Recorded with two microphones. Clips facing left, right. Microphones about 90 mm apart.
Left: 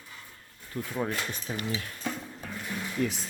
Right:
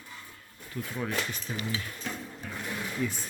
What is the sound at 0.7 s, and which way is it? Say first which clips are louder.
Speech: left 2 dB; 35° left (ahead or behind).